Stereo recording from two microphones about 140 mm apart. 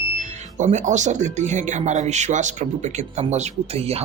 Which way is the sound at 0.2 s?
60° right (ahead or behind).